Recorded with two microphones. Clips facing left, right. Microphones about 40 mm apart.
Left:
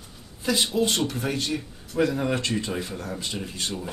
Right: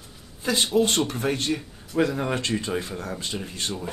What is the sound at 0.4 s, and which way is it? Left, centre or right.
A man's voice, right.